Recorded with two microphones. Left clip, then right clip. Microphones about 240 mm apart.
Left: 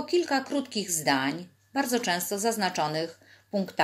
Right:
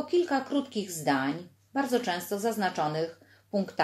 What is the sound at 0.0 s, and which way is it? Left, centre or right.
Speech, left.